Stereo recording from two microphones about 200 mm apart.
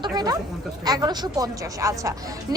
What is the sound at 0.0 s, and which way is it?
Chatter, 20° right (ahead or behind).